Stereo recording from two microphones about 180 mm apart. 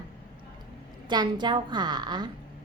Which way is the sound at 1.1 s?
25° right (ahead or behind).